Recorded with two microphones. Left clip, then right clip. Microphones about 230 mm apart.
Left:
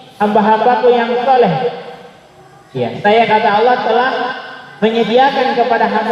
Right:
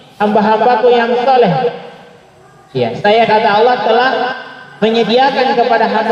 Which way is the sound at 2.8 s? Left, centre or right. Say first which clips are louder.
Right 1 dB; right.